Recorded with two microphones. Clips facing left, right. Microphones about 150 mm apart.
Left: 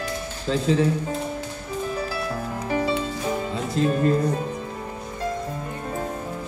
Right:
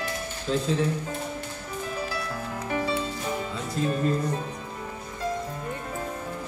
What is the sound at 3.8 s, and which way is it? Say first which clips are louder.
Speech: left 5 dB; 85° left.